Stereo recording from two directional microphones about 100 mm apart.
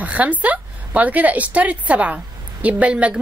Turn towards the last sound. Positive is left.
turn(degrees=-15)  # may be behind; listen again after turning